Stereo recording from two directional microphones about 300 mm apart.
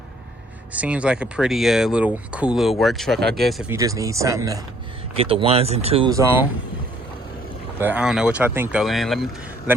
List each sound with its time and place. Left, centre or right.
0.7 s speech: centre
7.8 s speech: centre